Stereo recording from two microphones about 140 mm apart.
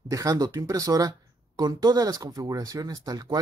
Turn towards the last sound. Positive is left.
turn(degrees=-30)  # may be behind; listen again after turning